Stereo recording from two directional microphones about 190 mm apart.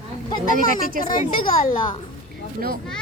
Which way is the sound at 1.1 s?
45° left (ahead or behind).